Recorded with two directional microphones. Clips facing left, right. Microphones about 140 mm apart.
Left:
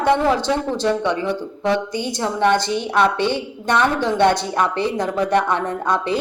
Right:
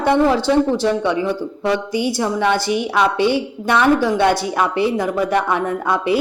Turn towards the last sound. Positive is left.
turn(degrees=-10)  # may be behind; listen again after turning